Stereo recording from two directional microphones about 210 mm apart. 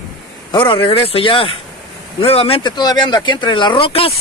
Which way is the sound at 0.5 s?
25° left (ahead or behind).